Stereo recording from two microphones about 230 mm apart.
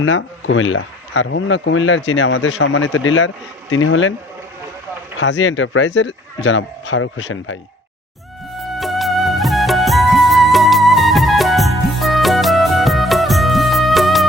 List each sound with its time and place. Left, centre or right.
0.0 s speech: left
5.2 s speech: left
8.5 s music: centre